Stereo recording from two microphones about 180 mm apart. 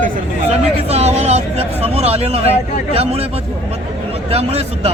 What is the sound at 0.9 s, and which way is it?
Speech, 35° right (ahead or behind).